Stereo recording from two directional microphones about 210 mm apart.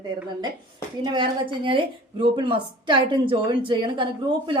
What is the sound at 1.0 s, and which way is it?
A woman's voice, 20° right (ahead or behind).